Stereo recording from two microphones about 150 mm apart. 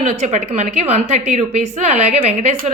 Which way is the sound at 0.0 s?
50° right (ahead or behind).